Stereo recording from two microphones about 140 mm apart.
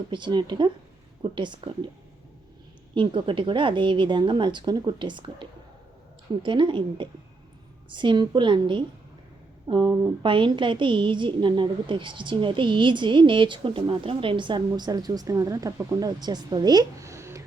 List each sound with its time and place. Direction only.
0.1 s a woman's voice: 35° right (ahead or behind)
2.9 s a woman's voice: 35° right (ahead or behind); by 17.4 s 20° right (ahead or behind)